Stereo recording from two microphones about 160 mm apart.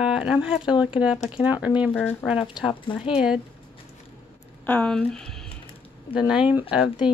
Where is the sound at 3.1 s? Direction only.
5° right (ahead or behind).